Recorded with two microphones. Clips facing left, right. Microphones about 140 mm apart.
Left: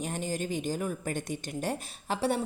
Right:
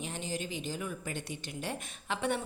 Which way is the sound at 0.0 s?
45° left (ahead or behind).